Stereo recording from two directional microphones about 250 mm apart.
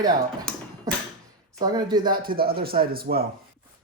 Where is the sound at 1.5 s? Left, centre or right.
Centre.